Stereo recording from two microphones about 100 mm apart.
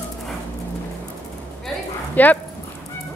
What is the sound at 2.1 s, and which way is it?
Speech, 15° left (ahead or behind).